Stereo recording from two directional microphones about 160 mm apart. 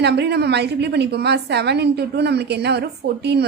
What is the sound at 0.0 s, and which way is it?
A woman's voice, 90° right.